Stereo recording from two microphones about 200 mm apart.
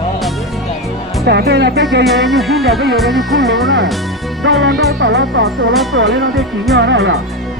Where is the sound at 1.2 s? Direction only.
55° right (ahead or behind).